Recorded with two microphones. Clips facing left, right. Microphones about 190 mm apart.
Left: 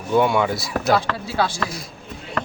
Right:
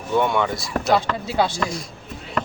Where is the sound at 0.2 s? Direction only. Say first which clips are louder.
Left 2 dB; 5° left (ahead or behind).